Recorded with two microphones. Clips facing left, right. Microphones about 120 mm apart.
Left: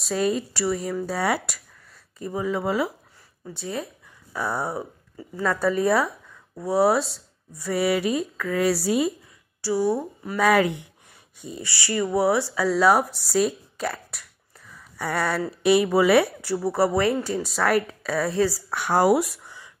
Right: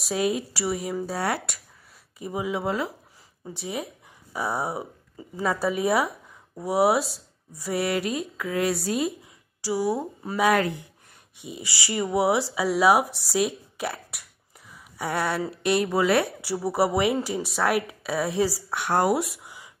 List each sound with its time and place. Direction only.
0.1 s a woman's voice: centre (ahead or behind)
2.1 s speech: 10° right (ahead or behind)
2.6 s a woman's voice: 5° left (ahead or behind)
3.4 s a sound: 20° right (ahead or behind)
4.5 s a woman's voice: centre (ahead or behind)
9.6 s a sound: 15° right (ahead or behind)
10.3 s a woman's voice: centre (ahead or behind)
11.6 s speech: 25° right (ahead or behind)
12.5 s a woman's voice: 5° right (ahead or behind)